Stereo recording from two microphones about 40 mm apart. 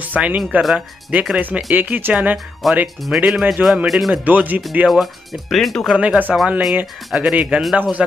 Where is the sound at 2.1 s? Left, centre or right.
Right.